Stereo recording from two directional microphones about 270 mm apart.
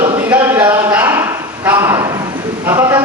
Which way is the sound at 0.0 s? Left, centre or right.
Centre.